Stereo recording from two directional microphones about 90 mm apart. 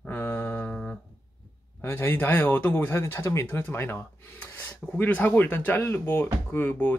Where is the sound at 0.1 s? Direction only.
20° left (ahead or behind).